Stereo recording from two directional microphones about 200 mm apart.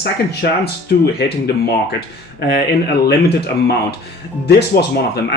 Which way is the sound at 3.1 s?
55° left (ahead or behind).